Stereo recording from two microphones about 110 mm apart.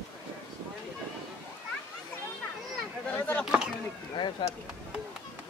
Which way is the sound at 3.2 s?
15° left (ahead or behind).